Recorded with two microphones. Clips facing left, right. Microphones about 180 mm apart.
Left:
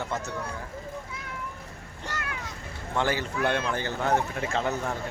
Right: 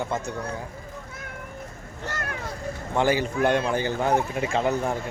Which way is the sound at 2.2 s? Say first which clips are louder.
Right 5 dB; 45° right (ahead or behind).